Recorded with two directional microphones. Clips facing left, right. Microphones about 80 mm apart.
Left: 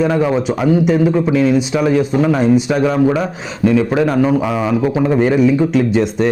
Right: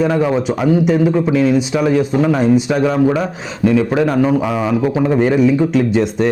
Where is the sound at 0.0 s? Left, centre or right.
Left.